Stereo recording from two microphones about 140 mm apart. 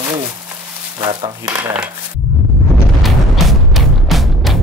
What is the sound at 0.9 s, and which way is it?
Speech, 35° right (ahead or behind).